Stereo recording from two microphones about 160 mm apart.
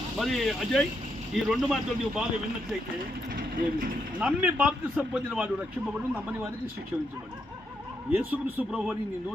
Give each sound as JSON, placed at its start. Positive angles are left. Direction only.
{"t": 0.2, "sound": "speech", "side_deg": 0}
{"t": 3.3, "sound": "speech", "side_deg": -65}
{"t": 4.2, "sound": "speech", "side_deg": -5}
{"t": 8.1, "sound": "speech", "side_deg": -10}